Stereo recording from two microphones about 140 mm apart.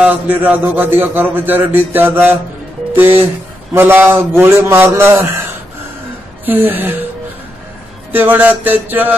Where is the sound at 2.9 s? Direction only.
15° right (ahead or behind).